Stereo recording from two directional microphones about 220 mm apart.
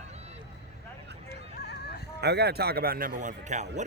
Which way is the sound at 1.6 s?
50° left (ahead or behind).